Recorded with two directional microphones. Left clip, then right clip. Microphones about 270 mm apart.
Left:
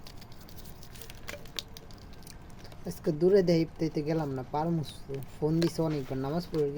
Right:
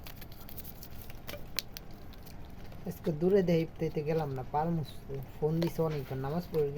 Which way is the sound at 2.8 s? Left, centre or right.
Left.